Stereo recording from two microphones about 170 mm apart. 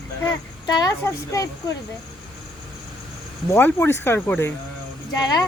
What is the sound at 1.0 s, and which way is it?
Speech, 15° left (ahead or behind).